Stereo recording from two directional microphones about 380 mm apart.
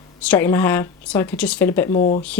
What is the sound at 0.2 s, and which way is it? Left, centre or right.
Speech, centre.